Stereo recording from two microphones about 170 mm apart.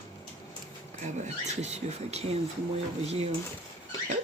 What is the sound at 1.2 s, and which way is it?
Speech, 40° right (ahead or behind).